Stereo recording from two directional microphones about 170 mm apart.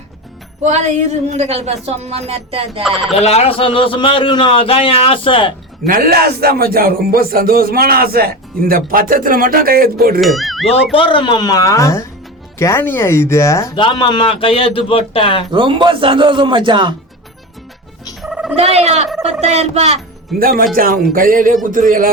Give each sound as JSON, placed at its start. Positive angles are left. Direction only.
{"t": 0.6, "sound": "speech", "side_deg": -45}
{"t": 2.8, "sound": "speech", "side_deg": 0}
{"t": 3.2, "sound": "a man's voice", "side_deg": 35}
{"t": 5.8, "sound": "speech", "side_deg": -55}
{"t": 10.2, "sound": "speech", "side_deg": 0}
{"t": 10.9, "sound": "speech", "side_deg": 30}
{"t": 13.7, "sound": "a man's voice", "side_deg": 30}
{"t": 15.5, "sound": "a man's voice", "side_deg": -30}
{"t": 18.2, "sound": "a sound", "side_deg": 0}
{"t": 18.5, "sound": "speech", "side_deg": -35}
{"t": 20.4, "sound": "speech", "side_deg": -60}